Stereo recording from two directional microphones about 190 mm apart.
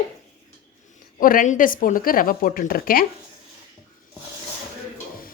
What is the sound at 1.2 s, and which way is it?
Speech, 45° left (ahead or behind).